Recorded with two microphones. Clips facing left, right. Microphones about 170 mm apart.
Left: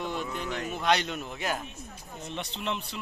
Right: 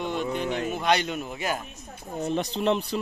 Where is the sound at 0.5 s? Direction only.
30° right (ahead or behind).